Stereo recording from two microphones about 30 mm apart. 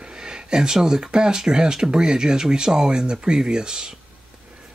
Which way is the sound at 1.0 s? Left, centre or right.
Right.